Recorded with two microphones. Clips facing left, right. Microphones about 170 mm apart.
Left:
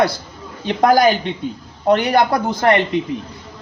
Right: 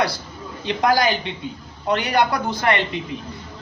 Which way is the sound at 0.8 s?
50° left (ahead or behind).